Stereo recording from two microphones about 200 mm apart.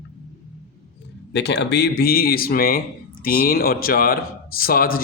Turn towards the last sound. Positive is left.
turn(degrees=45)  # may be behind; listen again after turning